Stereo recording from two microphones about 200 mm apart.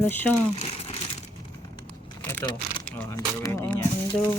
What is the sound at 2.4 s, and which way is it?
Speech, 20° left (ahead or behind).